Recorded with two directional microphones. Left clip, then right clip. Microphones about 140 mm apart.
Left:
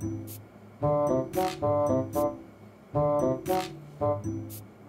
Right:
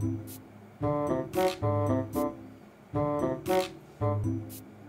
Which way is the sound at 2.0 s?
5° right (ahead or behind).